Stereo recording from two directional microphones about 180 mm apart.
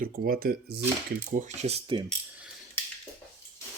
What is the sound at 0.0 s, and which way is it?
Speech, 55° right (ahead or behind).